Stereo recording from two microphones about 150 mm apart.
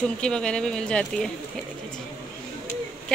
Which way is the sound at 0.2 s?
5° left (ahead or behind).